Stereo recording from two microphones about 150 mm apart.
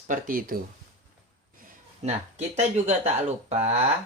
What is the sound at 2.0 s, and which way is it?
Speech, 45° right (ahead or behind).